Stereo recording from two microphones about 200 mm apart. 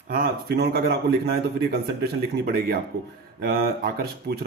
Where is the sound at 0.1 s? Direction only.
50° right (ahead or behind).